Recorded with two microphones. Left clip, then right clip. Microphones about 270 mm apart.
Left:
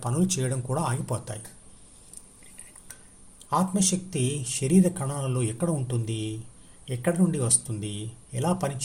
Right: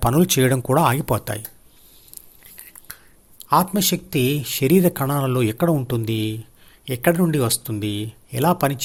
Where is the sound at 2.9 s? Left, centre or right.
Right.